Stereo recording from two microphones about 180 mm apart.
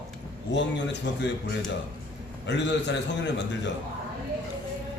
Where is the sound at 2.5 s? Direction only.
75° left (ahead or behind).